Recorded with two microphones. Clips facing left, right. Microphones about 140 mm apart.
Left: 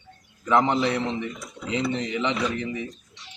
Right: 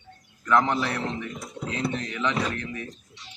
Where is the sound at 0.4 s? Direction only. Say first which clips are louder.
Left 2 dB; 20° left (ahead or behind).